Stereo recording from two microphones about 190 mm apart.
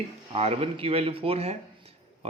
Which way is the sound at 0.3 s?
30° right (ahead or behind).